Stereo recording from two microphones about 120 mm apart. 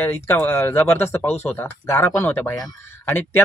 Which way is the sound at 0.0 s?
20° left (ahead or behind).